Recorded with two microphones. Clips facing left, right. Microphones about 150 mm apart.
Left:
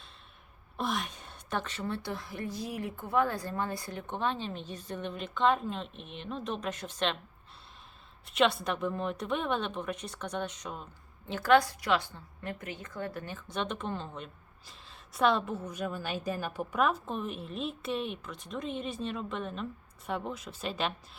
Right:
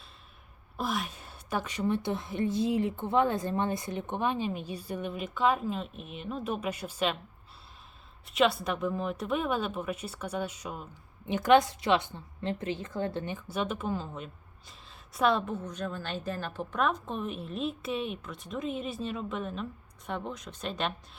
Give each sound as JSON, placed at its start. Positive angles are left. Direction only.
{"t": 0.8, "sound": "a woman's voice", "side_deg": -5}
{"t": 8.3, "sound": "a woman's voice", "side_deg": 0}
{"t": 11.3, "sound": "a woman's voice", "side_deg": -20}
{"t": 13.3, "sound": "a woman's voice", "side_deg": -5}